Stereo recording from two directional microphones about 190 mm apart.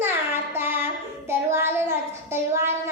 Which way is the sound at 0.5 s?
10° right (ahead or behind).